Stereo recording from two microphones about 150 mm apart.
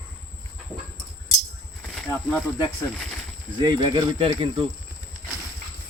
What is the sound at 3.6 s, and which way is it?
Speech, 30° right (ahead or behind).